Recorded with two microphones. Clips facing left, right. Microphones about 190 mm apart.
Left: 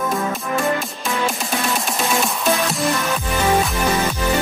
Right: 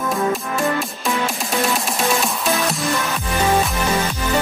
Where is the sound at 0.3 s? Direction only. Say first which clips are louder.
Even; centre (ahead or behind).